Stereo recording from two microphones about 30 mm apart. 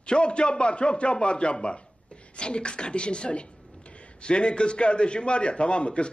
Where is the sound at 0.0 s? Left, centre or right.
Left.